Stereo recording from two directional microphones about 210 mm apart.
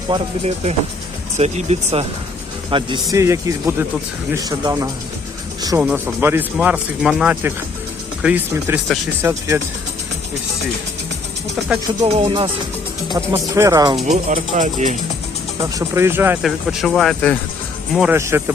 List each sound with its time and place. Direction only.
0.1 s speech: 30° right (ahead or behind); by 9.6 s 10° right (ahead or behind)
12.0 s speech: 25° right (ahead or behind)
13.1 s speech: 15° right (ahead or behind)
14.1 s speech: 35° right (ahead or behind)
15.6 s speech: 15° right (ahead or behind)